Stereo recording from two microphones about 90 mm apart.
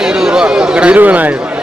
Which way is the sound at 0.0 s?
10° right (ahead or behind).